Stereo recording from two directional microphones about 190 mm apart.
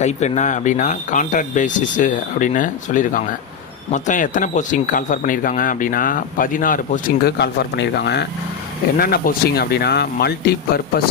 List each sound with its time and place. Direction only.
0.0 s speech: 35° left (ahead or behind); by 10.5 s 55° left (ahead or behind)